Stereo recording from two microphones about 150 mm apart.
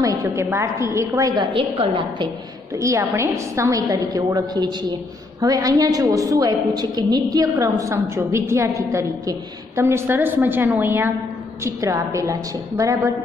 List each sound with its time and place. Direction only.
0.0 s a woman's voice: 25° right (ahead or behind)
2.7 s a woman's voice: 20° right (ahead or behind)